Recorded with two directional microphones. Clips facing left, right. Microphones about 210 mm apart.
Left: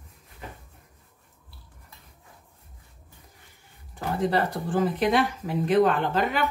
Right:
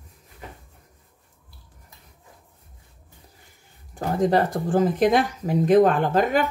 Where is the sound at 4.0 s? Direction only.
45° right (ahead or behind).